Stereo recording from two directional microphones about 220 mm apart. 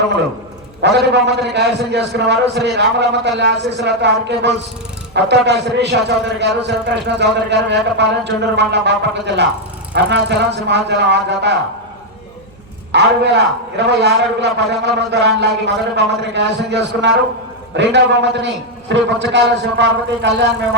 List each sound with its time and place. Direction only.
0.8 s a man's voice: 50° right (ahead or behind)
12.9 s a man's voice: 50° right (ahead or behind)